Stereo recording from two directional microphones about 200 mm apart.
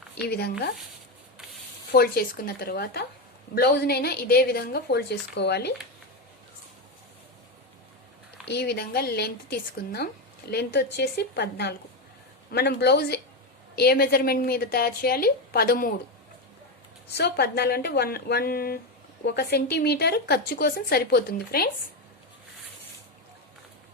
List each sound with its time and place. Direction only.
0.2 s a woman's voice: 55° left (ahead or behind)
1.9 s a woman's voice: 50° left (ahead or behind)
8.4 s a woman's voice: 55° left (ahead or behind)
17.1 s a woman's voice: 55° left (ahead or behind)